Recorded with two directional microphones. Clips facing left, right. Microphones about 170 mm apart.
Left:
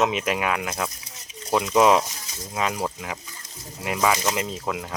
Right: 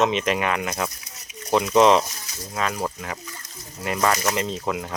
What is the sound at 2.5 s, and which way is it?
Speech, 15° left (ahead or behind).